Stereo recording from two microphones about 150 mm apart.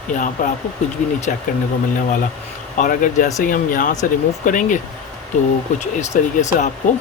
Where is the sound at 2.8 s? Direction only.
60° left (ahead or behind).